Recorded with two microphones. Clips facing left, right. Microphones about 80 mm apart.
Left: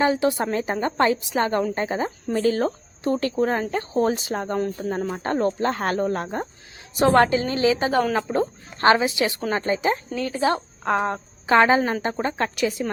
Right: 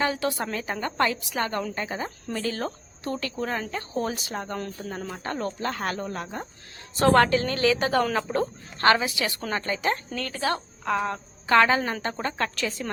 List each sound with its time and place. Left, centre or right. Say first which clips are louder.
0.0 s a woman's voice: left 6 dB; left
6.9 s a woman's voice: left 2 dB; centre
9.8 s a woman's voice: left 4 dB; centre
10.3 s a woman's voice: left 5 dB; left
11.4 s a woman's voice: left 3 dB; left